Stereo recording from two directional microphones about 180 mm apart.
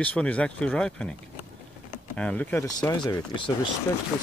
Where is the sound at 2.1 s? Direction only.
5° left (ahead or behind).